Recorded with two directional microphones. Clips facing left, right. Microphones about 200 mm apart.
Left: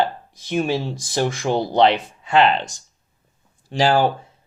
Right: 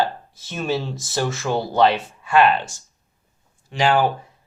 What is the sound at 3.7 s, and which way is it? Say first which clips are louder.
Speech: left 1 dB; 35° left (ahead or behind).